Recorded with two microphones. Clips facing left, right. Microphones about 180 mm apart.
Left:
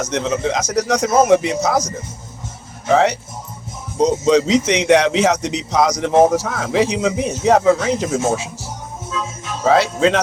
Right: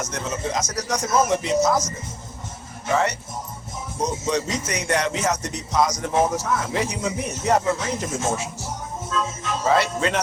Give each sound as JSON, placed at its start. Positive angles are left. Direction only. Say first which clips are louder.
{"t": 0.0, "sound": "speech", "louder": "left 8 dB", "side_deg": 85}
{"t": 2.9, "sound": "speech", "louder": "left 7 dB", "side_deg": 80}
{"t": 9.6, "sound": "speech", "louder": "left 7 dB", "side_deg": 90}